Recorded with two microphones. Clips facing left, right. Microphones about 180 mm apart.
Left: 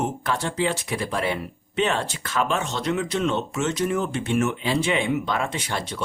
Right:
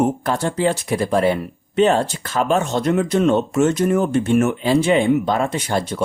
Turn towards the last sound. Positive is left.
turn(degrees=-45)  # may be behind; listen again after turning